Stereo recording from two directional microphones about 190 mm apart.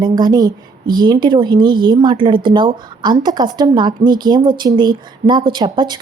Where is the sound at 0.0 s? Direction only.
20° right (ahead or behind).